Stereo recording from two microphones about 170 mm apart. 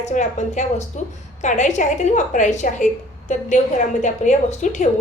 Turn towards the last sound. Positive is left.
turn(degrees=45)  # may be behind; listen again after turning